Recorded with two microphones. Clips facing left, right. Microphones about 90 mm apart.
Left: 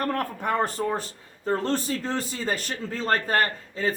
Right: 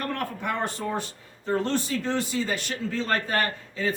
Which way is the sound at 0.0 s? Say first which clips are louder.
Left 3 dB; 40° left (ahead or behind).